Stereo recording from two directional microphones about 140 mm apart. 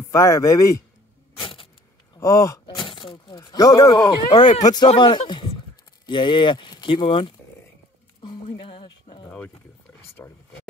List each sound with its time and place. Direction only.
0.1 s a man's voice: 20° left (ahead or behind)
1.4 s vehicle: 40° left (ahead or behind)
2.1 s speech: 20° left (ahead or behind)
2.6 s speech: 35° left (ahead or behind)
8.5 s a sound: 40° left (ahead or behind)
10.2 s speech: 20° left (ahead or behind)